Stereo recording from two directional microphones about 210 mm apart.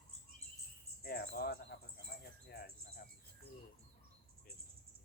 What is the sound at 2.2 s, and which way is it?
Cricket, 50° left (ahead or behind).